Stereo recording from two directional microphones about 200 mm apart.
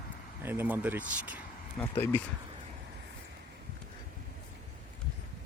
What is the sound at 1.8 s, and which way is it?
Speech, 10° left (ahead or behind).